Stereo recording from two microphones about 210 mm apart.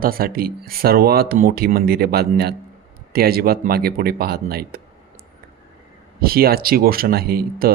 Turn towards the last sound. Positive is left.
turn(degrees=-45)  # may be behind; listen again after turning